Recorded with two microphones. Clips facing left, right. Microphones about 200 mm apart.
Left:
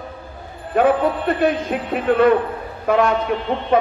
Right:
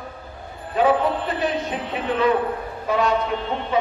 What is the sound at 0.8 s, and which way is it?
A man's voice, 55° left (ahead or behind).